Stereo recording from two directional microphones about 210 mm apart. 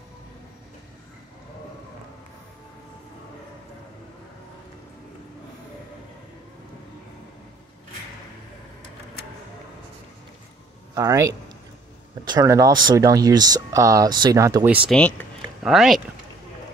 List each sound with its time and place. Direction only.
11.0 s a man's voice: 15° right (ahead or behind)
14.9 s speech: 5° left (ahead or behind)